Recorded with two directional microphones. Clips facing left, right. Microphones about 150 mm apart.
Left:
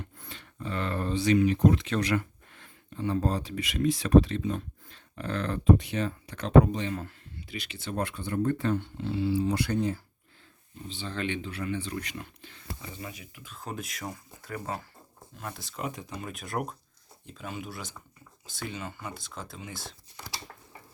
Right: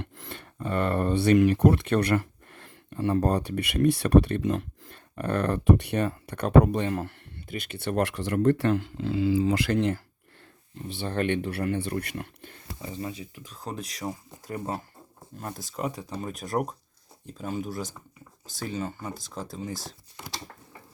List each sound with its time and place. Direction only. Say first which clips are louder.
0.0 s speech: right 5 dB; 65° right (ahead or behind)
4.9 s speech: right 6 dB; 55° right (ahead or behind); by 10.0 s 90° right
10.8 s speech: right 6 dB; 65° right (ahead or behind)
12.9 s speech: right 7 dB; 30° right (ahead or behind)